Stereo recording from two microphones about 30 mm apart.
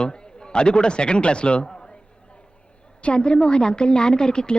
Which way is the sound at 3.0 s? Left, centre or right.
Left.